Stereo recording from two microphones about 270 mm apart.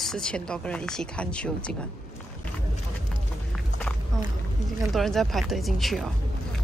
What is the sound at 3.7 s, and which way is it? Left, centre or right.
Walk, centre.